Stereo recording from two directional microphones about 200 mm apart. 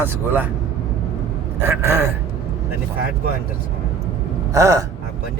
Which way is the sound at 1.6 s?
10° right (ahead or behind).